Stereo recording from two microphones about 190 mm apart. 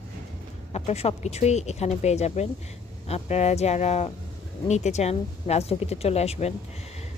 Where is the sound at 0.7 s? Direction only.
35° left (ahead or behind).